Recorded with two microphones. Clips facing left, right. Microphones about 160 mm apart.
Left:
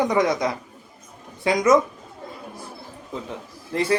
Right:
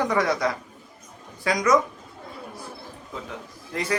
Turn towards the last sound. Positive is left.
turn(degrees=30)  # may be behind; listen again after turning